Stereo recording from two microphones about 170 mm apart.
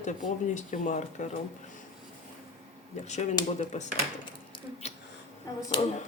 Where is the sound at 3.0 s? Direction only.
45° left (ahead or behind).